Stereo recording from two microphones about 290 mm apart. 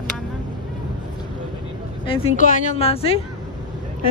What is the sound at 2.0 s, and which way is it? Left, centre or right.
Speech, centre.